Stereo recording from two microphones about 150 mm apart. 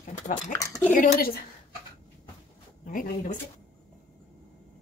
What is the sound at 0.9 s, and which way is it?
Speech, 75° left (ahead or behind).